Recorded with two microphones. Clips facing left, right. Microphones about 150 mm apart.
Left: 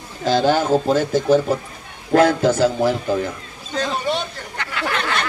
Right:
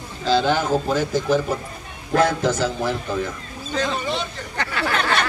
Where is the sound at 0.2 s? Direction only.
45° left (ahead or behind).